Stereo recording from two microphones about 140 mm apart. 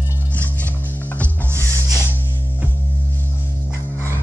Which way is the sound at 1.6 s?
20° right (ahead or behind).